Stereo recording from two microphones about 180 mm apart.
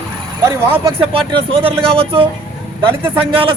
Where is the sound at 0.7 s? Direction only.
30° right (ahead or behind).